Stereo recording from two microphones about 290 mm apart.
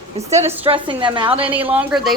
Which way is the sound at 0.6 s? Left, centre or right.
Centre.